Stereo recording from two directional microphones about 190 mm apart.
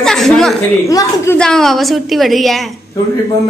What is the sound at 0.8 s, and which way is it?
Speech, 15° left (ahead or behind).